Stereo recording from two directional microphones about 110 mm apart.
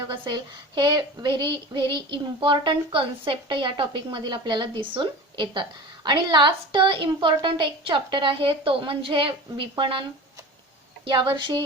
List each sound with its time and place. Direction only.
0.1 s a woman's voice: 45° right (ahead or behind)
11.0 s a woman's voice: 50° right (ahead or behind)